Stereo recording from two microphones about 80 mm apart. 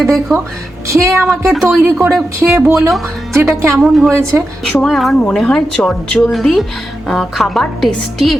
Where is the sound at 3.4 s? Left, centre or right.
Right.